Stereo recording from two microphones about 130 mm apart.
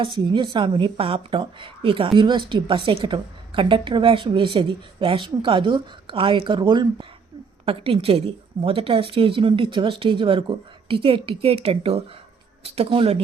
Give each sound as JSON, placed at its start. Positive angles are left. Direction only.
{"t": 0.0, "sound": "a woman's voice", "side_deg": -40}